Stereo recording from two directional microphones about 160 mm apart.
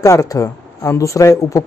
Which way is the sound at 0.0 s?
20° left (ahead or behind).